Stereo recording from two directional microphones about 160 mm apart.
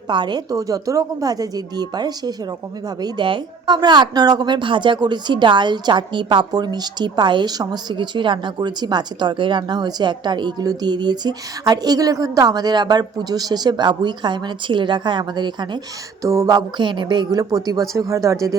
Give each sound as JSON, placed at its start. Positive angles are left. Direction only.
{"t": 0.1, "sound": "a woman's voice", "side_deg": -30}